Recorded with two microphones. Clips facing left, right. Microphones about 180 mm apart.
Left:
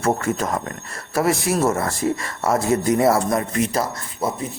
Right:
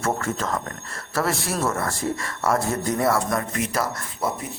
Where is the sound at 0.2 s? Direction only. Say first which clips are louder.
Left 4 dB; 15° left (ahead or behind).